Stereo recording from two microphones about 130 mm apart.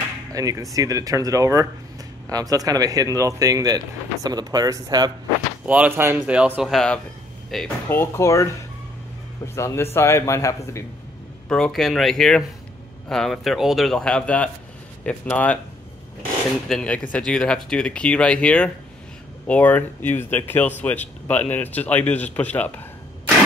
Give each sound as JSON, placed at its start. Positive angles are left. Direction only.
{"t": 0.3, "sound": "speech", "side_deg": -25}
{"t": 5.7, "sound": "a man's voice", "side_deg": -15}
{"t": 6.7, "sound": "speech", "side_deg": 5}
{"t": 7.9, "sound": "a man's voice", "side_deg": 20}
{"t": 9.6, "sound": "a man's voice", "side_deg": 20}
{"t": 11.4, "sound": "speech", "side_deg": 5}
{"t": 16.6, "sound": "speech", "side_deg": 5}